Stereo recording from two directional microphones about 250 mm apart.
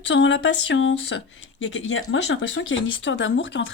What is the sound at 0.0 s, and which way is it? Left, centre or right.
Speech, left.